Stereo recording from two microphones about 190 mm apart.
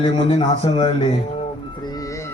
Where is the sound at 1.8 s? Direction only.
20° left (ahead or behind).